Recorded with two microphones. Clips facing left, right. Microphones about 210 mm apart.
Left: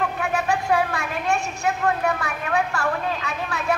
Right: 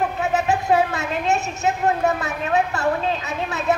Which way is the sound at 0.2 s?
20° right (ahead or behind).